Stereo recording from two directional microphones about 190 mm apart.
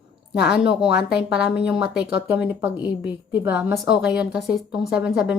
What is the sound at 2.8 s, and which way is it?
Speech, 25° left (ahead or behind).